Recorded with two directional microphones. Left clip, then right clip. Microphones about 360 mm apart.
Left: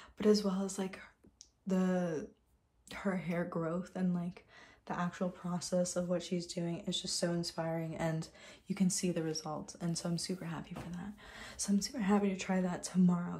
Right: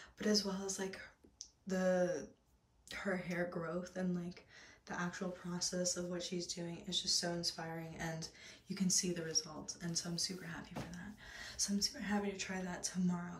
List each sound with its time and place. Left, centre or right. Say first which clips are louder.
0.2 s speech: left 6 dB; centre